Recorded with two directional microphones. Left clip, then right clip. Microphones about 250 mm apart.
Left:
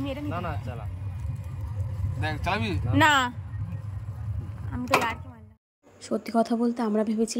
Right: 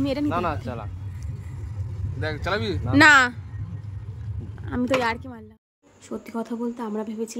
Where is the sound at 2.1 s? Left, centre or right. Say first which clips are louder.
Right 2 dB; centre.